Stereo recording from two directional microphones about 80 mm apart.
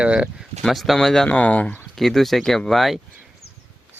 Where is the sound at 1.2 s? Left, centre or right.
Centre.